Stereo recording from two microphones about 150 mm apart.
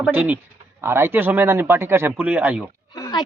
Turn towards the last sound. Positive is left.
turn(degrees=25)  # may be behind; listen again after turning